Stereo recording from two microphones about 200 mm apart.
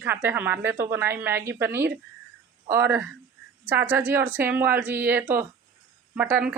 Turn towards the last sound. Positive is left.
turn(degrees=-10)  # may be behind; listen again after turning